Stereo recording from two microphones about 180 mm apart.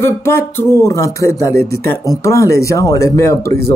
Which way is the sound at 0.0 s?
15° left (ahead or behind).